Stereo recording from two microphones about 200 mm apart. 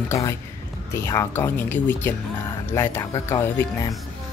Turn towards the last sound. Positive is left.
turn(degrees=15)  # may be behind; listen again after turning